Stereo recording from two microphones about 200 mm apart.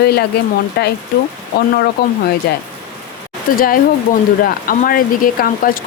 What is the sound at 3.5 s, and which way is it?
Speech, 45° left (ahead or behind).